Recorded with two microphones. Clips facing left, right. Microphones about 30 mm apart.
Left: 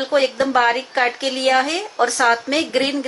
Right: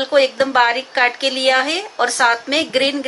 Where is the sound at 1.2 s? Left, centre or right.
Right.